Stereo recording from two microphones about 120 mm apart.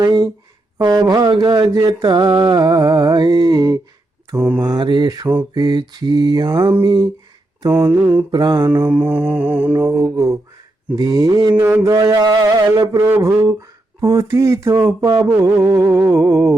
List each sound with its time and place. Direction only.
0.0 s a sound: 35° right (ahead or behind)
0.8 s mantra: 35° right (ahead or behind)
7.6 s speech: 30° right (ahead or behind)
8.3 s mantra: 40° right (ahead or behind)
8.6 s mantra: 20° right (ahead or behind)
11.5 s mantra: 15° right (ahead or behind)
11.8 s mantra: 30° right (ahead or behind)
13.0 s speech: 20° right (ahead or behind)